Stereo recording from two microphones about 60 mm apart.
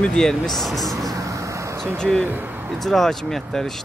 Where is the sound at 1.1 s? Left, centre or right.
Right.